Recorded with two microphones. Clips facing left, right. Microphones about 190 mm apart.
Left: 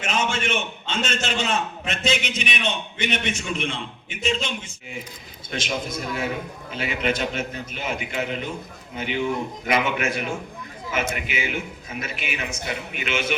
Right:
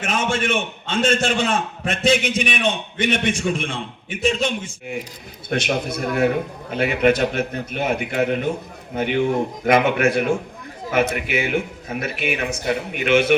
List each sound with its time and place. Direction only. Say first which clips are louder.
0.0 s a man's voice: right 3 dB; 50° right (ahead or behind)